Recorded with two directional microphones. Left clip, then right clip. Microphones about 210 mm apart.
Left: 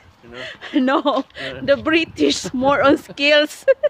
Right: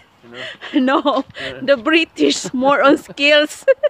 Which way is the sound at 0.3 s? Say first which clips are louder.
Right 2 dB; 15° right (ahead or behind).